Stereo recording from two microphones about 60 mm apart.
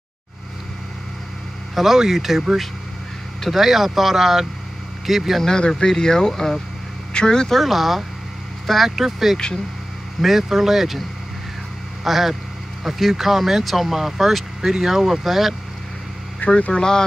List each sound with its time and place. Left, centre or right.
1.8 s speech: centre
5.4 s speech: centre
7.6 s speech: centre
16.3 s speech: left